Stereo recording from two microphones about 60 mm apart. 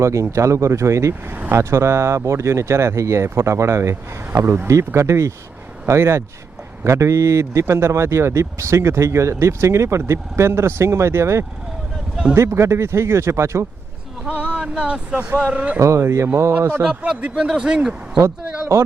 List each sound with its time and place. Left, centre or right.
0.0 s speech: right
1.3 s vehicle: right
1.5 s speech: right
4.4 s speech: right
14.3 s a sound: right
14.6 s speech: centre
15.8 s speech: right
16.0 s speech: right
17.2 s speech: centre